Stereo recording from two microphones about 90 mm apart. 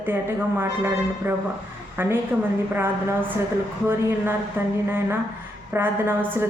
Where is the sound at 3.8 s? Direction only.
25° right (ahead or behind).